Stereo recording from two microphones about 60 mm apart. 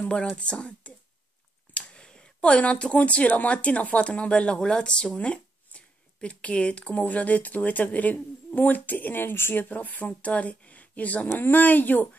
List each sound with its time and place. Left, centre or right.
0.4 s speech: centre